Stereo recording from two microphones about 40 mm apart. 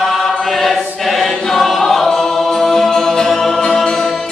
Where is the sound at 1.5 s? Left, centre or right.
Centre.